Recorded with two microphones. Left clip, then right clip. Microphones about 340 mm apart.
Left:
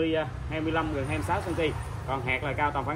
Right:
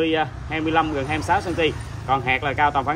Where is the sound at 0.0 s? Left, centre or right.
Right.